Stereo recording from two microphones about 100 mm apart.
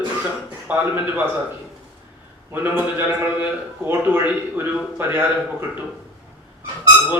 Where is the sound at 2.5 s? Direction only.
20° right (ahead or behind).